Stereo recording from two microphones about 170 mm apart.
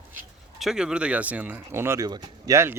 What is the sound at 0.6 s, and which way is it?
Speech, 5° right (ahead or behind).